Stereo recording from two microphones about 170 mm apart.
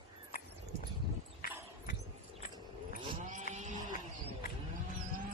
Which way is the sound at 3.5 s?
45° right (ahead or behind).